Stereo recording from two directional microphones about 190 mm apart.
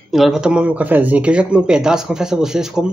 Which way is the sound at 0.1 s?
Centre (ahead or behind).